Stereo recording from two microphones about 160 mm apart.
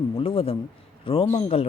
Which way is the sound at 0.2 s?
35° left (ahead or behind).